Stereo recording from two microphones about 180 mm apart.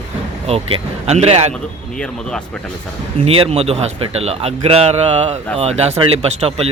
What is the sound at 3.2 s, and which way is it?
A man's voice, 30° right (ahead or behind).